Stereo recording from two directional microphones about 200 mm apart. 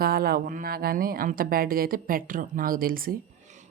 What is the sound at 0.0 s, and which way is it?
A woman's voice, 50° right (ahead or behind).